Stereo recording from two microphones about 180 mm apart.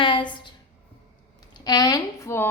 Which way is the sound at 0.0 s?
25° left (ahead or behind).